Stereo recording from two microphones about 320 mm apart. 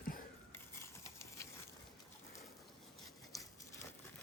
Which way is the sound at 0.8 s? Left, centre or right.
Centre.